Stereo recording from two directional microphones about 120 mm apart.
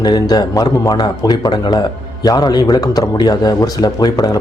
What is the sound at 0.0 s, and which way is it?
Speech, 35° left (ahead or behind).